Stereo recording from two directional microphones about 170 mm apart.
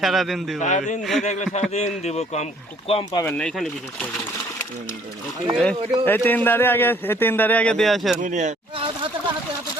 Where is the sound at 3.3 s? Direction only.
5° left (ahead or behind).